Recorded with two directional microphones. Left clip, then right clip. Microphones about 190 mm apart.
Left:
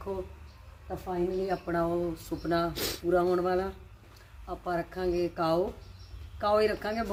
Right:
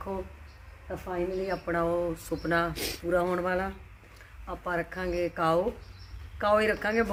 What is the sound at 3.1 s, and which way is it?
A woman's voice, 10° right (ahead or behind).